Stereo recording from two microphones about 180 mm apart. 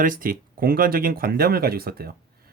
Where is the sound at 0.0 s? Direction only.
50° right (ahead or behind).